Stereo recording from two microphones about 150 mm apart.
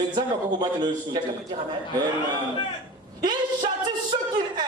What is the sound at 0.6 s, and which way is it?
Speech, 30° right (ahead or behind).